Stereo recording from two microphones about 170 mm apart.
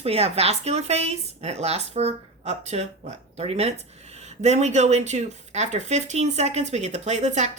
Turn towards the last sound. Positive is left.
turn(degrees=-45)  # may be behind; listen again after turning